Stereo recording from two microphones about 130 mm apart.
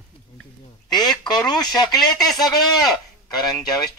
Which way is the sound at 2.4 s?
30° left (ahead or behind).